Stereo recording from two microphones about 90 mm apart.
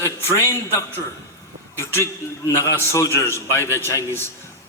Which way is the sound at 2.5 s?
30° left (ahead or behind).